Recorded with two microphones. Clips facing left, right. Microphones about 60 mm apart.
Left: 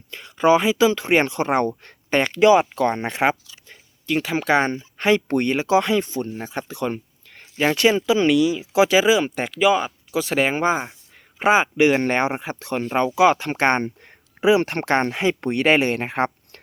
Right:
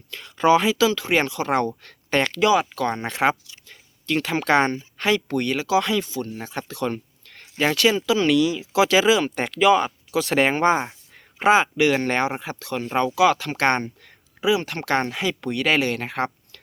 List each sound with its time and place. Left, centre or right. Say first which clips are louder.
0.1 s speech: left 1 dB; centre
4.9 s speech: left 4 dB; left
6.3 s speech: left 2 dB; centre
11.4 s speech: left 1 dB; left
14.8 s speech: even; left